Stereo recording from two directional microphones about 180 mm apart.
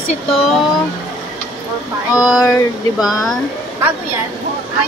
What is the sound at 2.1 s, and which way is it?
Speech, 5° right (ahead or behind).